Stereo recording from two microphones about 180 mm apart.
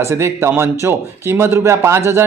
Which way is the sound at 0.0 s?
15° right (ahead or behind).